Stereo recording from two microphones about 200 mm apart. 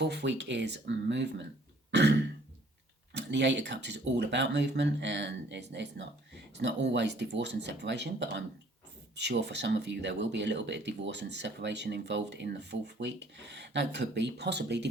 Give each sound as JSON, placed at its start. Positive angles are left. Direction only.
{"t": 0.0, "sound": "speech", "side_deg": -60}
{"t": 1.9, "sound": "throat clearing", "side_deg": -60}
{"t": 3.1, "sound": "speech", "side_deg": -60}